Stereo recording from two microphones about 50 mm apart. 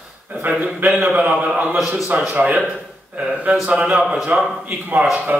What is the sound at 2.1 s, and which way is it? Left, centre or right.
Speech, right.